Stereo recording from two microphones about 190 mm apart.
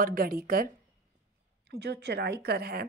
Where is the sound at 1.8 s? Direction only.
60° right (ahead or behind).